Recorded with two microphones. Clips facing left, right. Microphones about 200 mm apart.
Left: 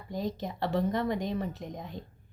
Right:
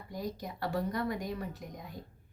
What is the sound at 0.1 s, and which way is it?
A woman's voice, 25° left (ahead or behind).